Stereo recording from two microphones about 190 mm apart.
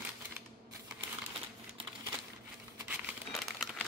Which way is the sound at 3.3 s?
Centre (ahead or behind).